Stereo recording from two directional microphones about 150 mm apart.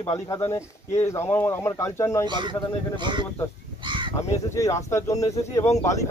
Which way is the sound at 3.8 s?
30° right (ahead or behind).